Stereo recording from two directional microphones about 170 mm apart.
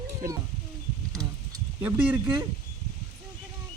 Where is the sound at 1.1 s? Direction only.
20° right (ahead or behind).